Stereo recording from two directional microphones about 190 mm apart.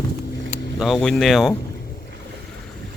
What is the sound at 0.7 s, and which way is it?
Speech, centre (ahead or behind).